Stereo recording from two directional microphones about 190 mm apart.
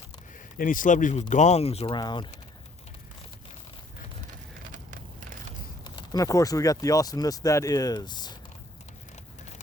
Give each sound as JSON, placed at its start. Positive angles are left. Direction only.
{"t": 0.6, "sound": "speech", "side_deg": 45}
{"t": 4.7, "sound": "vehicle", "side_deg": -45}
{"t": 5.8, "sound": "speech", "side_deg": 20}